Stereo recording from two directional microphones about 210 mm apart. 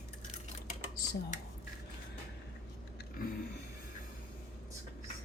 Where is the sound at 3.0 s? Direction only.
45° left (ahead or behind).